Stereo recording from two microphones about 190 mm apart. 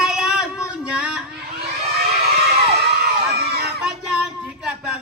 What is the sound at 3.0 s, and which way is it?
Crowd, 55° right (ahead or behind).